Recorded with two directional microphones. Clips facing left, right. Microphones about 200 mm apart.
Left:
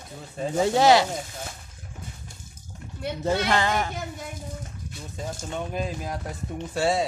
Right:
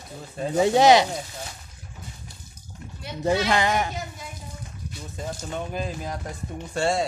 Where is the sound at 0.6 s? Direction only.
20° right (ahead or behind).